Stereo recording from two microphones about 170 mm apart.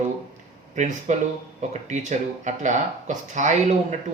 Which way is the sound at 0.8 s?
45° right (ahead or behind).